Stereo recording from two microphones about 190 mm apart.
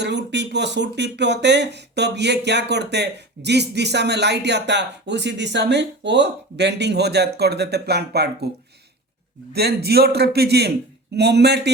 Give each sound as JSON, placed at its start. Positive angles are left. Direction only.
{"t": 0.0, "sound": "speech", "side_deg": -65}
{"t": 9.5, "sound": "speech", "side_deg": -55}